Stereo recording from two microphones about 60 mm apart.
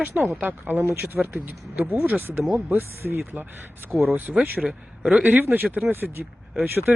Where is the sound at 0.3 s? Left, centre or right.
Right.